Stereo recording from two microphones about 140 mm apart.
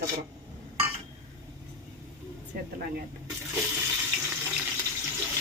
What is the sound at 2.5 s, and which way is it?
Speech, 90° right.